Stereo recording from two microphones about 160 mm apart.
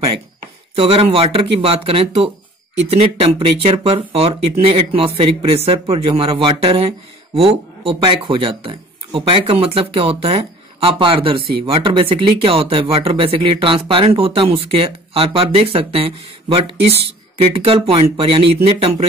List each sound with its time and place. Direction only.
0.7 s speech: 35° right (ahead or behind)